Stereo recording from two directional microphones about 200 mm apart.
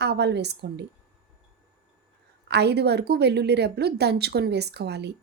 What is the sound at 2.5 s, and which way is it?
A woman's voice, 55° right (ahead or behind).